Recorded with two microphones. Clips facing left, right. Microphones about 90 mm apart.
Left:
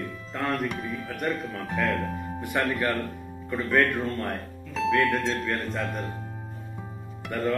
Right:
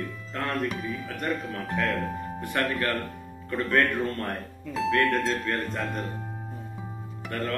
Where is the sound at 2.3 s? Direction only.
15° left (ahead or behind).